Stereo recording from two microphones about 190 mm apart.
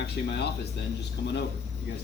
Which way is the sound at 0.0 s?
60° left (ahead or behind).